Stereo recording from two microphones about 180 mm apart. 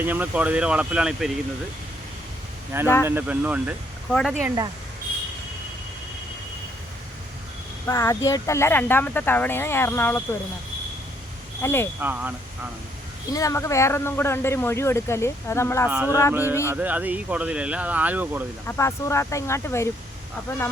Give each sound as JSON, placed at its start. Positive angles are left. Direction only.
{"t": 0.0, "sound": "speech", "side_deg": -10}
{"t": 2.8, "sound": "speech", "side_deg": 15}
{"t": 3.1, "sound": "speech", "side_deg": -10}
{"t": 7.9, "sound": "speech", "side_deg": 15}
{"t": 11.6, "sound": "speech", "side_deg": 15}
{"t": 11.9, "sound": "speech", "side_deg": -10}
{"t": 13.3, "sound": "speech", "side_deg": 15}
{"t": 15.9, "sound": "speech", "side_deg": -10}
{"t": 18.6, "sound": "speech", "side_deg": 15}